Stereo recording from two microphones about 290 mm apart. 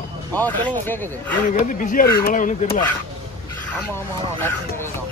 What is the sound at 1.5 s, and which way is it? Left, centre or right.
Speech, left.